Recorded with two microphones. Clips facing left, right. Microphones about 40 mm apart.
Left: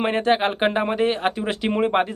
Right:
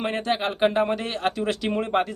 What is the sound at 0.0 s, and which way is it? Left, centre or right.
Speech, left.